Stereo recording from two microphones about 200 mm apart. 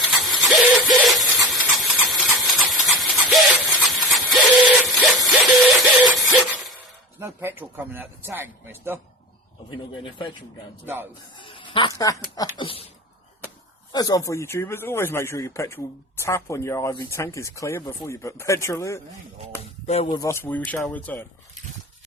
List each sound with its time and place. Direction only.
0.0 s a sound: centre (ahead or behind)
1.5 s squeal: centre (ahead or behind)
2.4 s a sound: centre (ahead or behind)
7.2 s a man's voice: 10° right (ahead or behind)
10.8 s a man's voice: 10° right (ahead or behind)
11.3 s speech: 25° left (ahead or behind)
13.9 s speech: 20° left (ahead or behind)
19.9 s speech: 30° left (ahead or behind)
20.1 s speech: 15° left (ahead or behind)